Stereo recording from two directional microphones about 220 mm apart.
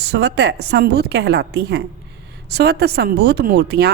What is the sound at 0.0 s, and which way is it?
A woman's voice, 50° right (ahead or behind).